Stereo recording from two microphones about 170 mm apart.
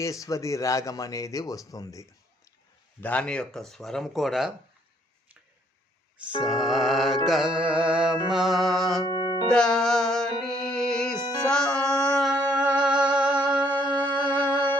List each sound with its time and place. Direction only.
0.0 s speech: 20° left (ahead or behind)
3.0 s speech: 10° left (ahead or behind)
6.4 s speech: centre (ahead or behind)
7.3 s music: 5° right (ahead or behind)
8.3 s speech: centre (ahead or behind)
9.0 s music: 25° left (ahead or behind)
9.5 s music: 5° left (ahead or behind)
11.2 s music: 25° left (ahead or behind)
11.4 s music: 5° left (ahead or behind)